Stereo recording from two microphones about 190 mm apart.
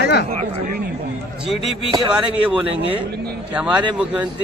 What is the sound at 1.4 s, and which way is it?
Speech, centre (ahead or behind).